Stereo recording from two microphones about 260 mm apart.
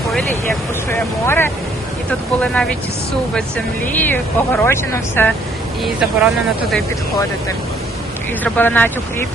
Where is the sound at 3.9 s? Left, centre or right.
Centre.